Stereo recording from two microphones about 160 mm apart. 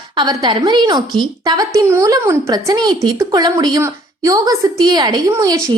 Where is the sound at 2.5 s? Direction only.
25° right (ahead or behind).